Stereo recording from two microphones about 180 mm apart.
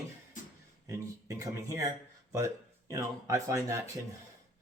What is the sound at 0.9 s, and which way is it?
Speech, 15° right (ahead or behind).